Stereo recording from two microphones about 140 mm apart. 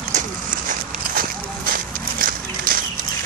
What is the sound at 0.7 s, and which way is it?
Walk, 90° right.